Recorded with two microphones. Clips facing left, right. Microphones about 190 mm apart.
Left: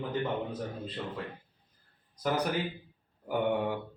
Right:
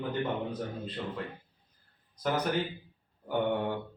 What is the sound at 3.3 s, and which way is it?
Speech, 10° left (ahead or behind).